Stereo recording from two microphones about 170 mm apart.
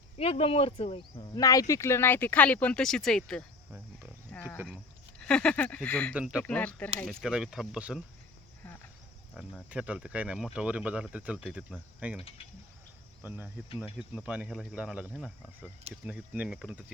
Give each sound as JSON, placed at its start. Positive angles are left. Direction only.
{"t": 0.2, "sound": "speech", "side_deg": 35}
{"t": 1.4, "sound": "speech", "side_deg": 20}
{"t": 4.3, "sound": "a sound", "side_deg": 5}
{"t": 5.2, "sound": "speech", "side_deg": 5}
{"t": 6.1, "sound": "cricket", "side_deg": -5}
{"t": 6.4, "sound": "speech", "side_deg": 10}
{"t": 9.3, "sound": "speech", "side_deg": 0}
{"t": 13.2, "sound": "cricket", "side_deg": -10}
{"t": 14.3, "sound": "speech", "side_deg": -5}